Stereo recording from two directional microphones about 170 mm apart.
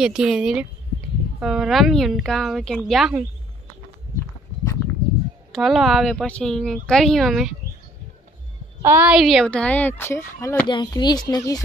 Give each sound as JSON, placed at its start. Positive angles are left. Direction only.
{"t": 0.0, "sound": "speech", "side_deg": -5}
{"t": 5.5, "sound": "speech", "side_deg": 0}
{"t": 8.8, "sound": "a woman's voice", "side_deg": -15}
{"t": 9.1, "sound": "a woman's voice", "side_deg": 0}
{"t": 10.7, "sound": "speech", "side_deg": 25}